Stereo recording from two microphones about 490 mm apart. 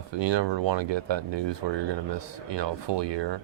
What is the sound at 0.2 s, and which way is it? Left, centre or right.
Speech, right.